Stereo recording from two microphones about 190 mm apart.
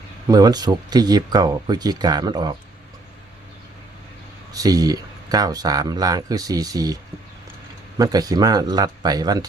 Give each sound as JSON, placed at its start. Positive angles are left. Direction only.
{"t": 0.3, "sound": "speech", "side_deg": -20}
{"t": 4.5, "sound": "speech", "side_deg": -20}